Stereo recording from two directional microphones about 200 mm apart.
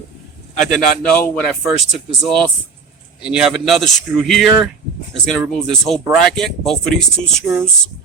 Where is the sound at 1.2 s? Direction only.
5° left (ahead or behind).